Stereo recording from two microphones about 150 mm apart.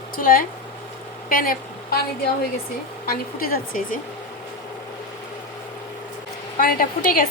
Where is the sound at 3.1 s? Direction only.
75° left (ahead or behind).